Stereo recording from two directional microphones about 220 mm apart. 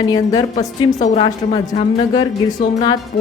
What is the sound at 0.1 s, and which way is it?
Speech, 15° left (ahead or behind).